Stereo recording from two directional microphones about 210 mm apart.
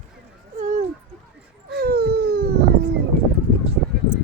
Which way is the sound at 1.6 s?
50° right (ahead or behind).